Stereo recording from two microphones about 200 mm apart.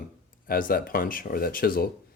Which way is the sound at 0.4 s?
45° left (ahead or behind).